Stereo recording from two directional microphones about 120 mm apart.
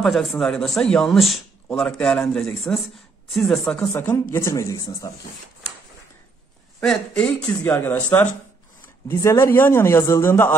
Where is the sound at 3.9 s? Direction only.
20° left (ahead or behind).